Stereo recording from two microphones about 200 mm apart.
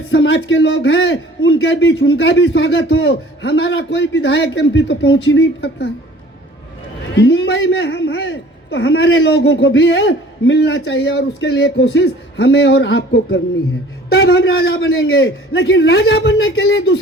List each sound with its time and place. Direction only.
0.1 s a man's voice: 70° left (ahead or behind)
7.2 s a man's voice: 60° left (ahead or behind)
15.0 s a man's voice: 90° left; by 17.0 s 65° left (ahead or behind)